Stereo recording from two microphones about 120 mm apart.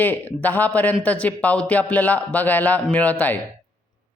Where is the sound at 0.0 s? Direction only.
15° left (ahead or behind).